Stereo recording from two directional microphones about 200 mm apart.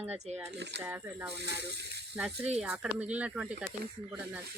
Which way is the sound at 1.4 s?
55° right (ahead or behind).